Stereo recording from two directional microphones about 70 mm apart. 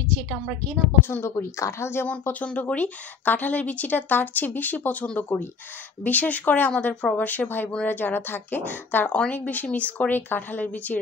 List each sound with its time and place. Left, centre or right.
1.0 s a woman's voice: left
1.3 s a woman's voice: left
2.4 s a woman's voice: left